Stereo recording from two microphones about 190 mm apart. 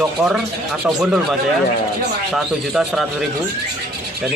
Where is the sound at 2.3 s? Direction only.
Centre (ahead or behind).